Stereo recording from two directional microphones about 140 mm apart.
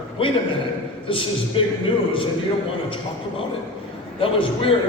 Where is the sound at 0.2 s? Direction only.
40° left (ahead or behind).